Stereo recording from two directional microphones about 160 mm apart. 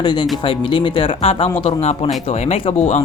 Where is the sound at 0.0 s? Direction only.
30° left (ahead or behind).